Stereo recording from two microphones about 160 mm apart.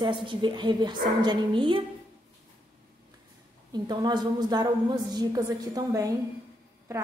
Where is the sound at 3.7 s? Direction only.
25° right (ahead or behind).